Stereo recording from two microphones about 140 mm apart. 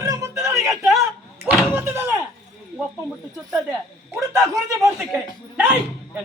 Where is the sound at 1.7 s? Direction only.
15° right (ahead or behind).